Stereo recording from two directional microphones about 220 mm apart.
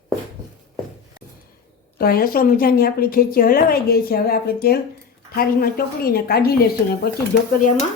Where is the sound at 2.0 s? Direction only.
45° left (ahead or behind).